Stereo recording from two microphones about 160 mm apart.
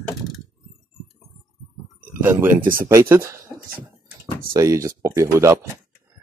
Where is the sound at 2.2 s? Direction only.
15° right (ahead or behind).